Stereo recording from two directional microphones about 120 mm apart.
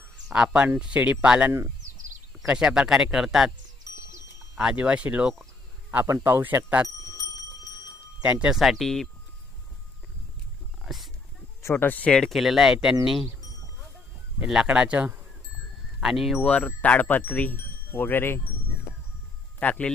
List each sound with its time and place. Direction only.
0.3 s speech: 10° right (ahead or behind)
4.6 s speech: 10° right (ahead or behind)
8.2 s speech: 10° right (ahead or behind)
10.8 s speech: centre (ahead or behind)
11.6 s speech: 15° left (ahead or behind); by 13.0 s 5° right (ahead or behind)
14.3 s speech: 5° right (ahead or behind)
16.5 s speech: 10° left (ahead or behind)
19.5 s a man's voice: 10° left (ahead or behind)